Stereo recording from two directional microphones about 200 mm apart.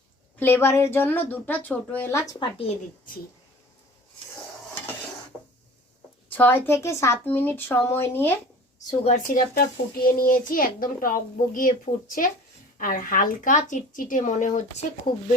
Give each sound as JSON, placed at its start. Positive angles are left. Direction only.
{"t": 0.3, "sound": "a woman's voice", "side_deg": 10}
{"t": 6.3, "sound": "a woman's voice", "side_deg": 10}
{"t": 9.0, "sound": "a child's voice", "side_deg": 40}